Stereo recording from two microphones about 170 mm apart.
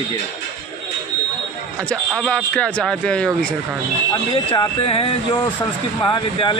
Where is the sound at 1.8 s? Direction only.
5° left (ahead or behind).